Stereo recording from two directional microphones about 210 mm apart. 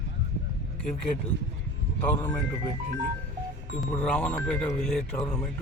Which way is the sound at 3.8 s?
5° left (ahead or behind).